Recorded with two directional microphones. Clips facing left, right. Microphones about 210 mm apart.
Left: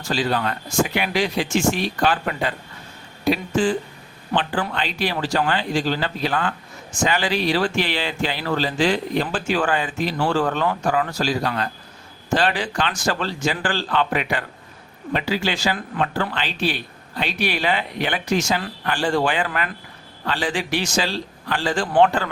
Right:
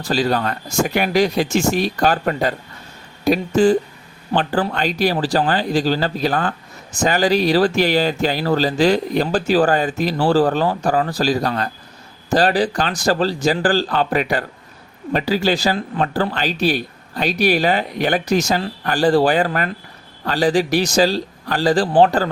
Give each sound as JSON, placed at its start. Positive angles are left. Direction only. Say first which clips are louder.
{"t": 0.0, "sound": "speech", "louder": "right 4 dB", "side_deg": -40}